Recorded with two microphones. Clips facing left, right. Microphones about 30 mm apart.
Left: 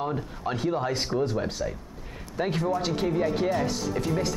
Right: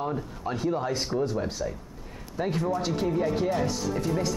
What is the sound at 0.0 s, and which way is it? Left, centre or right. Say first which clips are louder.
Speech: left 1 dB; left.